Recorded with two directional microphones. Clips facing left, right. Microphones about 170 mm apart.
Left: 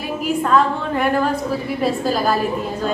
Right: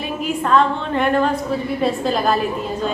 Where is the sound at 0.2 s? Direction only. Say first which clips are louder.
Even; 5° left (ahead or behind).